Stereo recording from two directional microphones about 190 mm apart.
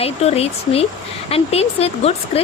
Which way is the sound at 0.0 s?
30° left (ahead or behind).